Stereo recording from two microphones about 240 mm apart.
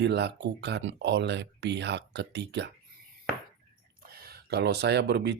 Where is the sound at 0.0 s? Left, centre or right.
Right.